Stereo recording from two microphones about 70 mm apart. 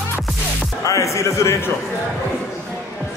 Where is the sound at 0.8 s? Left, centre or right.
Left.